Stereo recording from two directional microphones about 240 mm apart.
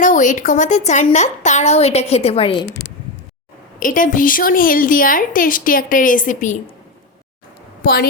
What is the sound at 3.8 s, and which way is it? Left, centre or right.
A woman's voice, left.